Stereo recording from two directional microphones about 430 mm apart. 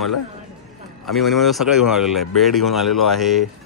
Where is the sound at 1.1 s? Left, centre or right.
Centre.